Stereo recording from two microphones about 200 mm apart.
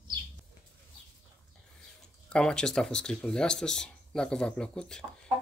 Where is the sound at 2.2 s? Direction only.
5° left (ahead or behind).